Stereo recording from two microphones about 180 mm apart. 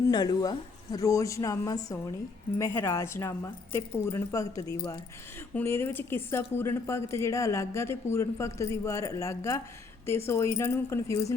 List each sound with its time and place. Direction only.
0.1 s a woman's voice: 20° left (ahead or behind)